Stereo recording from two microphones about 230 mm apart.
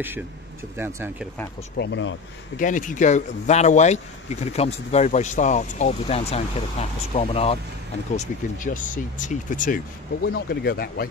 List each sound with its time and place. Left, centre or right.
0.7 s speech: centre
1.8 s speech: left
2.6 s speech: left